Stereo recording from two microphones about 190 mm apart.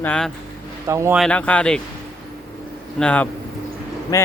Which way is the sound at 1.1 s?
5° left (ahead or behind).